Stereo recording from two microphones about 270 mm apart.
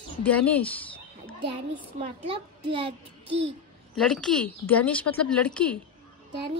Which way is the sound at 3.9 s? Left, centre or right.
Centre.